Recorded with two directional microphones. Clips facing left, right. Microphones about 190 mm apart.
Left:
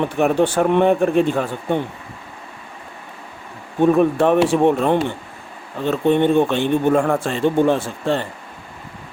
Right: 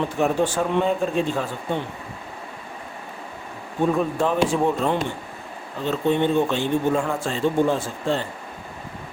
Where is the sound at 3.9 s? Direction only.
65° left (ahead or behind).